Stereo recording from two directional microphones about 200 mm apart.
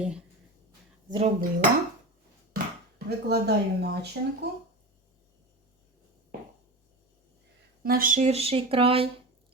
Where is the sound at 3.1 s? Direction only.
55° right (ahead or behind).